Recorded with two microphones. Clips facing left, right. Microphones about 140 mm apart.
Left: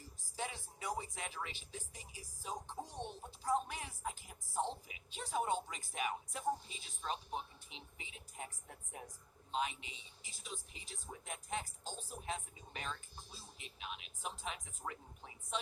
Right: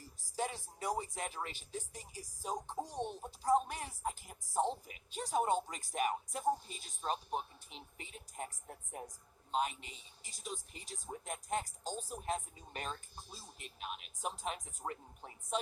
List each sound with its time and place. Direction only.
0.3 s speech: 40° right (ahead or behind)